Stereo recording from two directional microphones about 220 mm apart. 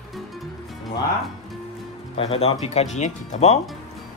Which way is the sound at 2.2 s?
25° left (ahead or behind).